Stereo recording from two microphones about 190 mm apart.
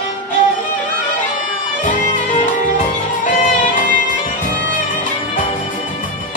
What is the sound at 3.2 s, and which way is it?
Music, 45° left (ahead or behind).